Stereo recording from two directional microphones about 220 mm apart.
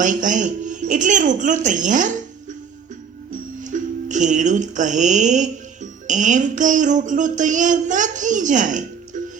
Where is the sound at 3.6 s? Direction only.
35° right (ahead or behind).